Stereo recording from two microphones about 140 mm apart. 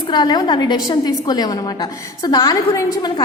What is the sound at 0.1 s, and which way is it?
A woman's voice, 30° left (ahead or behind).